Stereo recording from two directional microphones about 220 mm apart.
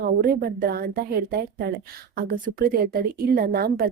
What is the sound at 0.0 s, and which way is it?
A woman's voice, 45° right (ahead or behind).